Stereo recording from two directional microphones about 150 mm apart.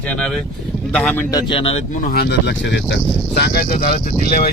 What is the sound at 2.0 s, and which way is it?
Speech, 90° left.